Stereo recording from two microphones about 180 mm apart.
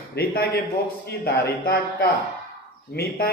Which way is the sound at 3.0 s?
60° left (ahead or behind).